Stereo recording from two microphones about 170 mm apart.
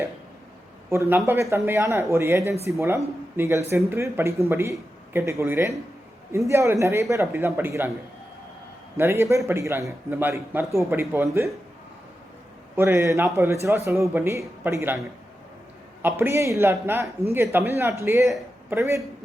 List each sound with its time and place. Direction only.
0.9 s a man's voice: 15° right (ahead or behind)
9.0 s speech: 15° right (ahead or behind)
12.7 s speech: 15° right (ahead or behind)
16.0 s speech: 10° right (ahead or behind)